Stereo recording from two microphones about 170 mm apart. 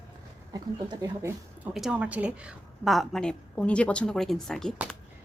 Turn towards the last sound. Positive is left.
turn(degrees=5)  # may be behind; listen again after turning